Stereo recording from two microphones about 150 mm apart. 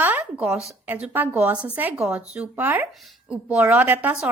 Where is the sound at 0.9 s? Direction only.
10° right (ahead or behind).